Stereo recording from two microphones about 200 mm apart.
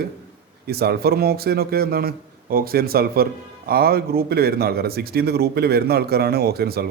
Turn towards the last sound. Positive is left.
turn(degrees=-50)  # may be behind; listen again after turning